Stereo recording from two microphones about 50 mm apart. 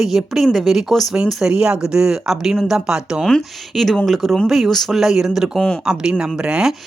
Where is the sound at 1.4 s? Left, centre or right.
Centre.